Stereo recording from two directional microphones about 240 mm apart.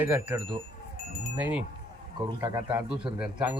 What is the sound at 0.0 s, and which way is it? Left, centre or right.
A man's voice, centre.